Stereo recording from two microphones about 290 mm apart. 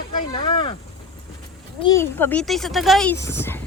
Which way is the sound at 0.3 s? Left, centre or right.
Centre.